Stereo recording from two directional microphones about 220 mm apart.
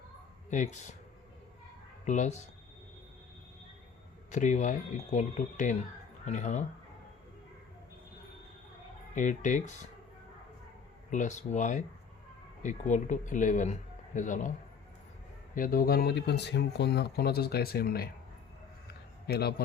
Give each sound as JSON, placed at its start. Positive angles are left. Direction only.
{"t": 0.5, "sound": "a man's voice", "side_deg": 35}
{"t": 2.0, "sound": "a man's voice", "side_deg": 35}
{"t": 4.3, "sound": "a man's voice", "side_deg": 35}
{"t": 9.1, "sound": "a man's voice", "side_deg": 35}
{"t": 11.1, "sound": "a man's voice", "side_deg": 35}
{"t": 15.5, "sound": "speech", "side_deg": 40}
{"t": 19.3, "sound": "speech", "side_deg": 45}